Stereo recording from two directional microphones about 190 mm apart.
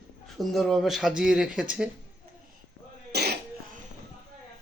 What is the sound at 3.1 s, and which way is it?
Cough, 60° right (ahead or behind).